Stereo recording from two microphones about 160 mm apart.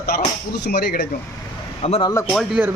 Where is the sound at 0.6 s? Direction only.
90° left.